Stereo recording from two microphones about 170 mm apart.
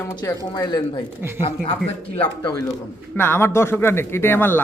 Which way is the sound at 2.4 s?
25° left (ahead or behind).